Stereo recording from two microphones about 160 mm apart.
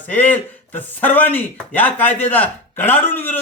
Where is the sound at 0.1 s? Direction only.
10° left (ahead or behind).